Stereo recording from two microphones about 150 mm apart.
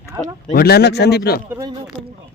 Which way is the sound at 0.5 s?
90° left.